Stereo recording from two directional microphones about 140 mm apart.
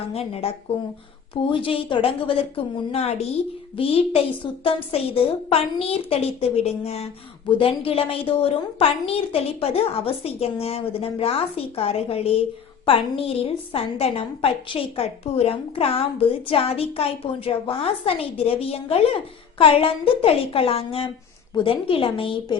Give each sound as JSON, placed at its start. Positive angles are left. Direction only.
{"t": 0.1, "sound": "a woman's voice", "side_deg": 45}